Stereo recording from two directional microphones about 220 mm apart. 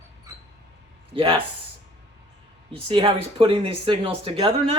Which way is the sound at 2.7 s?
25° right (ahead or behind).